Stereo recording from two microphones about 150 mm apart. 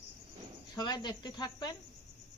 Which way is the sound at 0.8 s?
30° left (ahead or behind).